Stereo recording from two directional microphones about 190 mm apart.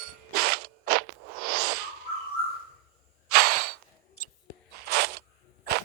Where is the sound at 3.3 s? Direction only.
55° right (ahead or behind).